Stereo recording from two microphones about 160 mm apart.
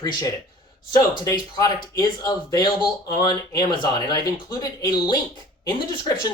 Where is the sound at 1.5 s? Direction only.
25° left (ahead or behind).